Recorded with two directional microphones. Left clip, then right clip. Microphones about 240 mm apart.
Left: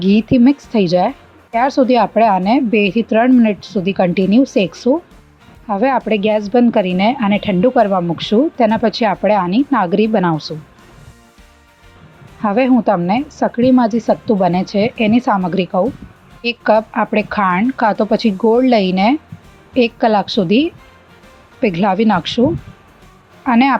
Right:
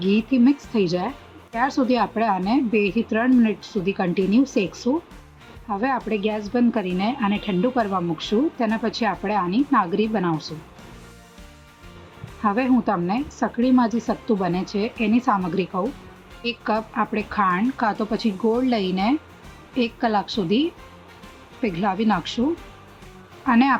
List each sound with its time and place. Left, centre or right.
0.0 s a woman's voice: left
12.4 s a woman's voice: left
23.5 s a woman's voice: left